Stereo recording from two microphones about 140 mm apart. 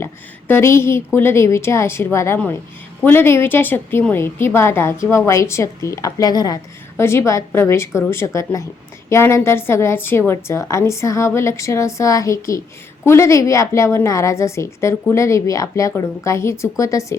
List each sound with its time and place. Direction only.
0.0 s a woman's voice: 15° left (ahead or behind)